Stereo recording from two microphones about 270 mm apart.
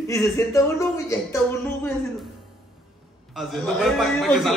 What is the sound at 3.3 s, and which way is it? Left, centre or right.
A man's voice, centre.